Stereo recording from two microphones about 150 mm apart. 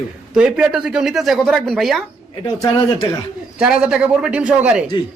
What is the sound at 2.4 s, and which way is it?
Speech, 25° left (ahead or behind).